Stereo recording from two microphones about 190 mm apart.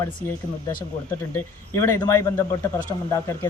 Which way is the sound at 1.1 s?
10° left (ahead or behind).